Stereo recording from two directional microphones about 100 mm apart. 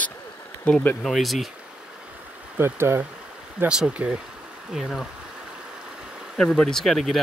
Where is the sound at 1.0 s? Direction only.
Centre (ahead or behind).